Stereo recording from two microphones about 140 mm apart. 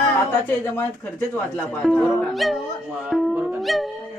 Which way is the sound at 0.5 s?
15° left (ahead or behind).